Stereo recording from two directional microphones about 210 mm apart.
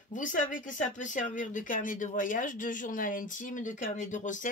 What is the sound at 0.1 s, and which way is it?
Speech, 40° left (ahead or behind).